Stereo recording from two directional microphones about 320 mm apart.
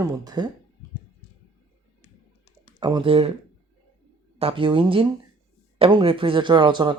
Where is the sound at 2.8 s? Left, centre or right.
Centre.